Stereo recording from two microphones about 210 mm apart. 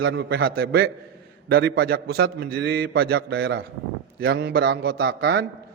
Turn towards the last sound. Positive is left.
turn(degrees=-45)  # may be behind; listen again after turning